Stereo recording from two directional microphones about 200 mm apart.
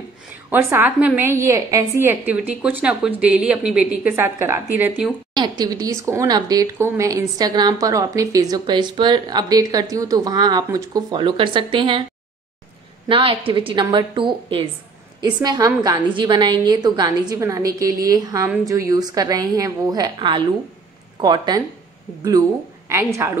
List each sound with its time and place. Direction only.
0.5 s a woman's voice: 10° right (ahead or behind)
5.3 s speech: 20° right (ahead or behind)
13.1 s speech: 25° right (ahead or behind)
22.8 s a woman's voice: 15° right (ahead or behind)